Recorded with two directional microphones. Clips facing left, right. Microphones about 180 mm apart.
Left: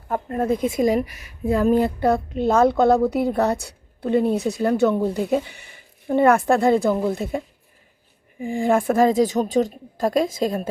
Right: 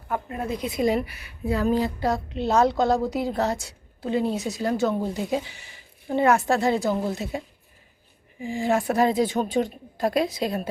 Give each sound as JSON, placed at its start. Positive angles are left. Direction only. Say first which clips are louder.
{"t": 0.1, "sound": "a woman's voice", "louder": "left 6 dB", "side_deg": 45}